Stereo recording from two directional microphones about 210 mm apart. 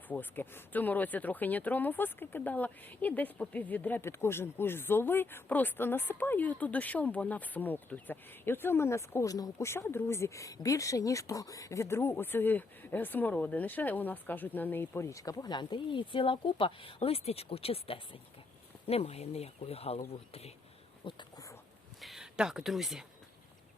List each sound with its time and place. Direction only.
0.1 s speech: 10° left (ahead or behind); by 20.5 s 30° left (ahead or behind)
21.0 s a sound: 20° left (ahead or behind)
22.0 s speech: centre (ahead or behind)